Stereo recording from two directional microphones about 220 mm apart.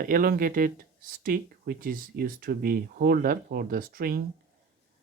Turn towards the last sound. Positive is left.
turn(degrees=-40)  # may be behind; listen again after turning